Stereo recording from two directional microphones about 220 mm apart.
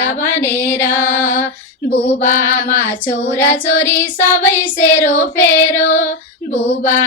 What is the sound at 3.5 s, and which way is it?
Child singing, 10° left (ahead or behind).